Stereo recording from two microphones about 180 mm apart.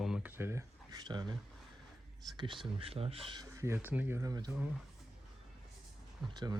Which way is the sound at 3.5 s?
15° right (ahead or behind).